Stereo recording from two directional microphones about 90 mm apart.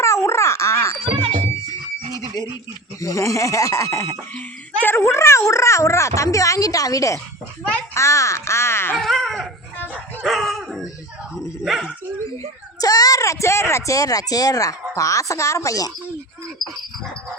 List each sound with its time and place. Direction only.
0.0 s a sound: 35° left (ahead or behind)
1.0 s music: 80° right
2.1 s a sound: 40° left (ahead or behind)
3.0 s speech: 40° left (ahead or behind)
4.4 s speech: 20° left (ahead or behind)
9.0 s dog: centre (ahead or behind)
12.8 s speech: 45° left (ahead or behind)